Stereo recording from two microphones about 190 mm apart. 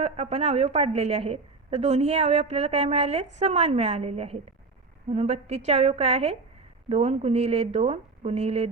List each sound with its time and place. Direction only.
0.0 s a woman's voice: 35° right (ahead or behind)